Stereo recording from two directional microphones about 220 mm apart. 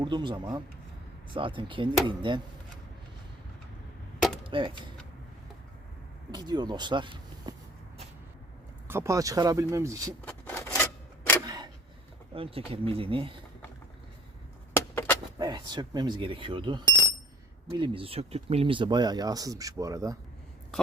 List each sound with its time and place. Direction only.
0.0 s speech: 20° right (ahead or behind)
4.4 s speech: 25° right (ahead or behind)
6.3 s speech: 20° right (ahead or behind)
8.9 s speech: 10° right (ahead or behind)
10.2 s wood: 10° left (ahead or behind)
11.4 s a sound: 20° right (ahead or behind)
12.3 s speech: 25° right (ahead or behind)
14.7 s a sound: 10° left (ahead or behind)
15.4 s speech: 20° right (ahead or behind)